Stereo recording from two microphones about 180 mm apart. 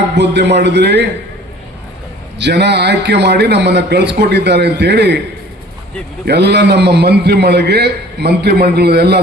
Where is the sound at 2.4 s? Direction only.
70° right (ahead or behind).